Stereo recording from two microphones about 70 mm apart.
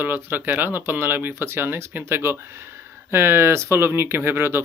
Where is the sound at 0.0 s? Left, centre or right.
Right.